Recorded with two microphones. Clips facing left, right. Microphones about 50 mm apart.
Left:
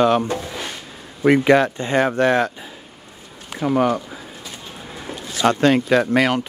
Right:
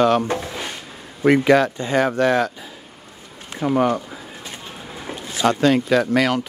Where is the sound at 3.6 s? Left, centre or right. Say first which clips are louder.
Even; centre.